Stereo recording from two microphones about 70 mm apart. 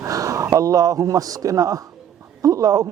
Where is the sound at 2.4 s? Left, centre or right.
Right.